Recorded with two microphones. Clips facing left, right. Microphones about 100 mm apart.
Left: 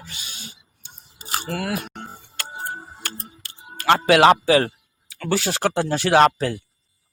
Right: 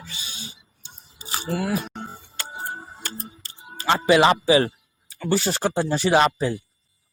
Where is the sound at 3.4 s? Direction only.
70° left (ahead or behind).